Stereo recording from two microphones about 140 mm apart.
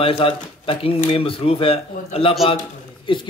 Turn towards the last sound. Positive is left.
turn(degrees=40)  # may be behind; listen again after turning